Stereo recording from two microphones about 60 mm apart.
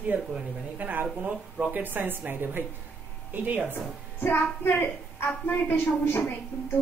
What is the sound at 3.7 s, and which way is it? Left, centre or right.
A woman's voice, left.